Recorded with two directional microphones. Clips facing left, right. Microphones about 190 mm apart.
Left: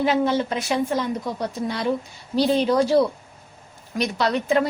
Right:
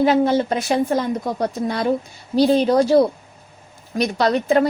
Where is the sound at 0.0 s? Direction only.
40° right (ahead or behind).